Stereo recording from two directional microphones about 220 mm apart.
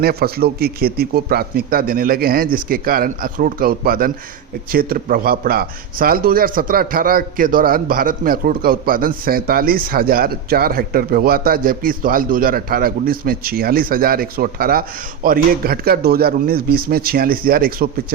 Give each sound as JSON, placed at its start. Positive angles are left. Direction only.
{"t": 0.0, "sound": "a man's voice", "side_deg": -45}